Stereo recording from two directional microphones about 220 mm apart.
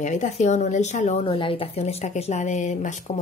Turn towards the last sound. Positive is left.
turn(degrees=35)  # may be behind; listen again after turning